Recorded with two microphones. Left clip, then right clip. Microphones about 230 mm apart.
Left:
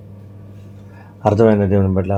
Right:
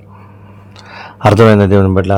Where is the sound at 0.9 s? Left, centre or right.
Right.